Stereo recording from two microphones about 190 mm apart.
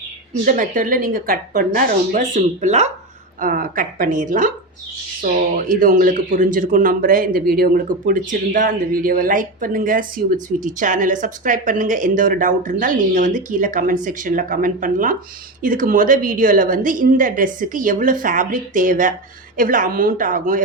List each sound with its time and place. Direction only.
0.4 s speech: 45° right (ahead or behind)